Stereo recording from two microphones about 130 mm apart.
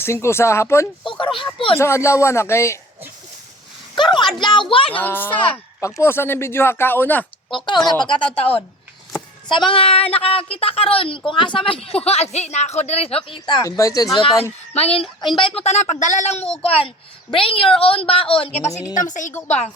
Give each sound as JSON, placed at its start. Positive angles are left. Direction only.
{"t": 0.0, "sound": "speech", "side_deg": 20}
{"t": 1.0, "sound": "speech", "side_deg": 40}
{"t": 1.8, "sound": "speech", "side_deg": 20}
{"t": 3.9, "sound": "a sound", "side_deg": 35}
{"t": 4.7, "sound": "speech", "side_deg": 45}
{"t": 4.9, "sound": "speech", "side_deg": 15}
{"t": 7.5, "sound": "speech", "side_deg": 35}
{"t": 13.4, "sound": "speech", "side_deg": 30}
{"t": 14.7, "sound": "a sound", "side_deg": 50}
{"t": 15.3, "sound": "speech", "side_deg": 40}
{"t": 15.6, "sound": "speech", "side_deg": 60}
{"t": 16.6, "sound": "speech", "side_deg": 45}
{"t": 18.9, "sound": "a woman's voice", "side_deg": 75}
{"t": 19.5, "sound": "speech", "side_deg": 55}